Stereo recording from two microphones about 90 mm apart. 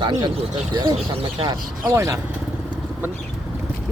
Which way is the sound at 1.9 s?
35° right (ahead or behind).